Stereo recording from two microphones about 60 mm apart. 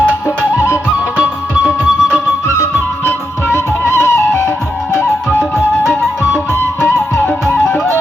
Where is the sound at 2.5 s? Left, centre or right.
Left.